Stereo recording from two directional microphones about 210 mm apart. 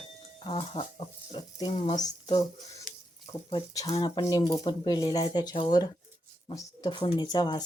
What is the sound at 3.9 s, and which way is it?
Speech, 20° left (ahead or behind).